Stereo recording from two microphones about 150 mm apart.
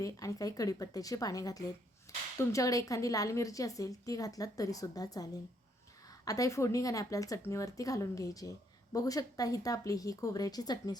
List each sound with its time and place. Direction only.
0.0 s a woman's voice: 20° left (ahead or behind)
2.1 s a sound: 20° left (ahead or behind)
2.4 s a woman's voice: 20° left (ahead or behind)